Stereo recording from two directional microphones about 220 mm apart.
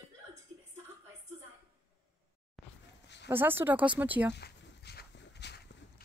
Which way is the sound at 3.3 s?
10° right (ahead or behind).